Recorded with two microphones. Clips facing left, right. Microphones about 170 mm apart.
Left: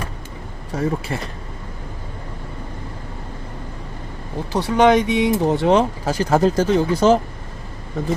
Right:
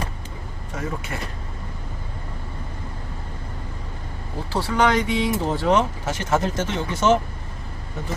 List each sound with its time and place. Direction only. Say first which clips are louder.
0.8 s speech: left 7 dB; 30° left (ahead or behind)
4.5 s speech: left 6 dB; 20° left (ahead or behind)